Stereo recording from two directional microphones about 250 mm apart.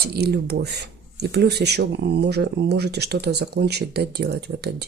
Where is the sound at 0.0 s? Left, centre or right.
Right.